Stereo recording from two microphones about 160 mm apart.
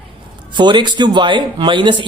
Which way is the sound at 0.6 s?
30° right (ahead or behind).